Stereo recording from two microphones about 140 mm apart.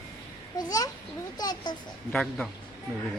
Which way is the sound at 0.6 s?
25° left (ahead or behind).